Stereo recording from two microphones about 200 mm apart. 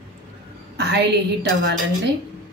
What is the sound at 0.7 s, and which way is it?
Speech, 55° right (ahead or behind).